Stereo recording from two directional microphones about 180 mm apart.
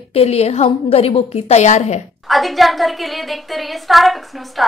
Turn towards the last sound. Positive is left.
turn(degrees=0)  # may be behind; listen again after turning